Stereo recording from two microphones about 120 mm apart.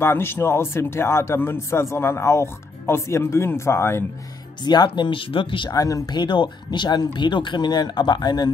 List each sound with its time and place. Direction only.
0.0 s speech: 20° left (ahead or behind)
4.6 s speech: 40° left (ahead or behind)
5.7 s speech: 30° left (ahead or behind)